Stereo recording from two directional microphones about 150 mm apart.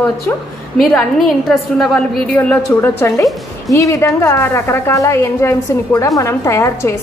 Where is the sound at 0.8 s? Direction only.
Centre (ahead or behind).